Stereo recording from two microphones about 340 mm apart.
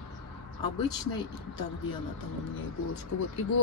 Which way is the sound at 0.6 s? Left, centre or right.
Centre.